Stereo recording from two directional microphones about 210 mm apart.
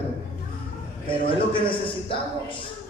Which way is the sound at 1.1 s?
25° left (ahead or behind).